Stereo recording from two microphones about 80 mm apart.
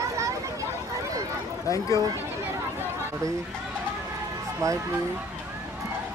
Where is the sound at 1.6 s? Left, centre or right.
Left.